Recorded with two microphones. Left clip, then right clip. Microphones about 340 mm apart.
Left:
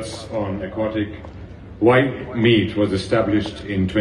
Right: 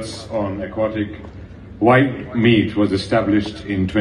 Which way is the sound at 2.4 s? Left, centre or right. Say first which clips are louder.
Right 1 dB; centre.